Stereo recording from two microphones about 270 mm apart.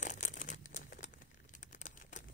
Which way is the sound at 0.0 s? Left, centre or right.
Left.